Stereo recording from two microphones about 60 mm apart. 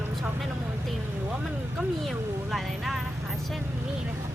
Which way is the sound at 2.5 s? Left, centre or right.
Centre.